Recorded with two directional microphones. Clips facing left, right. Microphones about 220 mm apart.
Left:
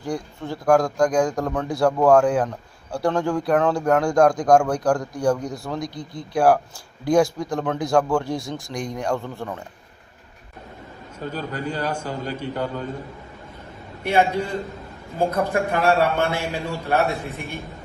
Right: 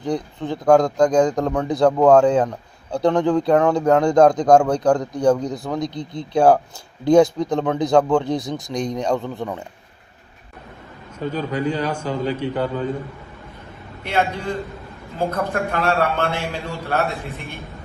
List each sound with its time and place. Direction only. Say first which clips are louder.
0.0 s speech: right 4 dB; 20° right (ahead or behind)
11.3 s a man's voice: right 6 dB; 10° left (ahead or behind)
14.0 s a man's voice: left 2 dB; 10° left (ahead or behind)